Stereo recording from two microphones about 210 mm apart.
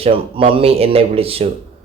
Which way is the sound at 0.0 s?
25° right (ahead or behind).